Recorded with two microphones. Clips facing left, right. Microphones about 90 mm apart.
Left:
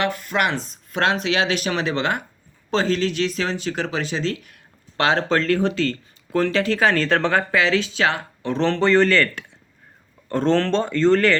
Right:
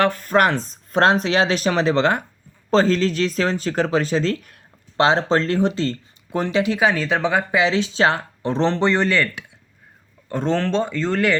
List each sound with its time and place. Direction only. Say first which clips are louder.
0.0 s speech: right 5 dB; 40° right (ahead or behind)
4.9 s speech: right 2 dB; 25° right (ahead or behind); by 11.3 s 10° right (ahead or behind)